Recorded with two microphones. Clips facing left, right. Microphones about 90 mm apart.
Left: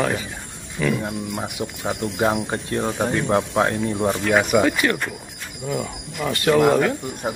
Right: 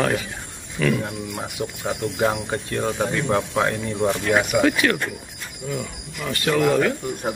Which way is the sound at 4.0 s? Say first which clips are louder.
Even; 10° left (ahead or behind).